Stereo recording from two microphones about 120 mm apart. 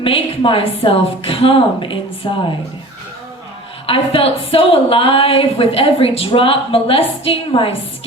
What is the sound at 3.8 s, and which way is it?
A woman's voice, 50° left (ahead or behind).